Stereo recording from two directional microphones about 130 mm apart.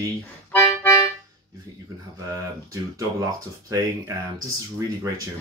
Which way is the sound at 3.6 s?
25° right (ahead or behind).